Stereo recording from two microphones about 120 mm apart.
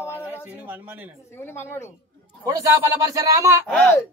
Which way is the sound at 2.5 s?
30° right (ahead or behind).